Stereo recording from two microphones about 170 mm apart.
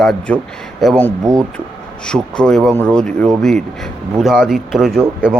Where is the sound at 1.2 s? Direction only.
20° right (ahead or behind).